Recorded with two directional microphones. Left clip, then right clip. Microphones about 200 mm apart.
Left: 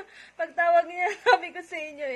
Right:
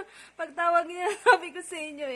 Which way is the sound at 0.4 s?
20° right (ahead or behind).